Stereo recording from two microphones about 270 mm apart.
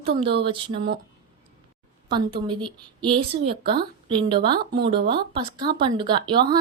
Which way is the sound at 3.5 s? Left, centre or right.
Right.